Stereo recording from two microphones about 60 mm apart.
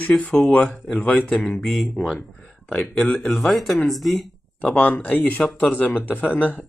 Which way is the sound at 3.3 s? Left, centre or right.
Centre.